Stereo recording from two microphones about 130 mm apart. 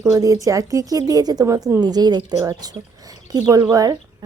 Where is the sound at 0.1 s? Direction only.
25° right (ahead or behind).